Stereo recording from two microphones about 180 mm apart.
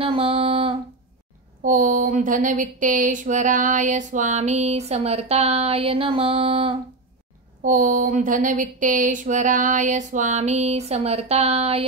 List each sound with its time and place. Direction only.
0.0 s a sound: 30° right (ahead or behind)
1.6 s speech: 50° right (ahead or behind); by 6.7 s 30° right (ahead or behind)
7.6 s speech: 45° right (ahead or behind)